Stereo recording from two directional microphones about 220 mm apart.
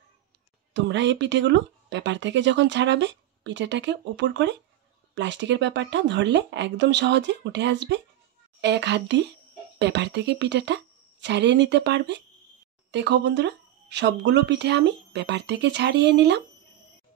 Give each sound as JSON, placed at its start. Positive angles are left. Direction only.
{"t": 0.7, "sound": "speech", "side_deg": -55}